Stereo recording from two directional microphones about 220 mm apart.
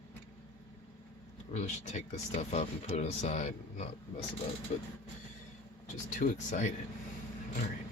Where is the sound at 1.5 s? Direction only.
30° left (ahead or behind).